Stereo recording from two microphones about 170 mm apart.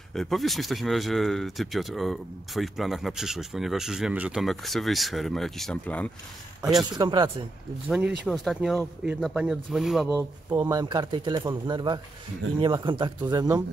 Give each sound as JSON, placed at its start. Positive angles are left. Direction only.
{"t": 0.1, "sound": "speech", "side_deg": 0}
{"t": 6.6, "sound": "speech", "side_deg": -5}
{"t": 6.9, "sound": "speech", "side_deg": -25}
{"t": 7.9, "sound": "speech", "side_deg": 0}
{"t": 10.5, "sound": "speech", "side_deg": -25}